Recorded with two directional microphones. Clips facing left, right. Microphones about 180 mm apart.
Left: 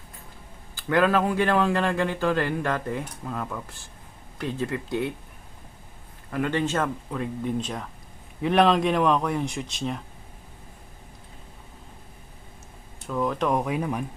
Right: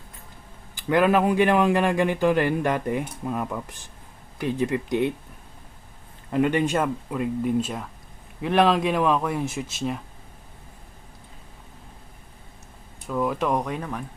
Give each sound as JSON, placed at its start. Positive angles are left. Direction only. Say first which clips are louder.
{"t": 0.8, "sound": "a man's voice", "louder": "right 2 dB", "side_deg": -15}
{"t": 6.3, "sound": "a man's voice", "louder": "right 4 dB", "side_deg": -15}
{"t": 13.1, "sound": "speech", "louder": "right 1 dB", "side_deg": -5}